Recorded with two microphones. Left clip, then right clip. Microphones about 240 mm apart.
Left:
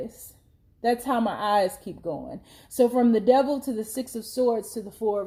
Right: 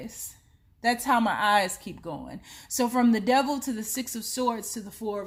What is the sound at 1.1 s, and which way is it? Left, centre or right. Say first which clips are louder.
Speech: right 2 dB; right.